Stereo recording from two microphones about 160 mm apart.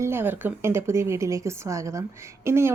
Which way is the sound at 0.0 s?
15° right (ahead or behind).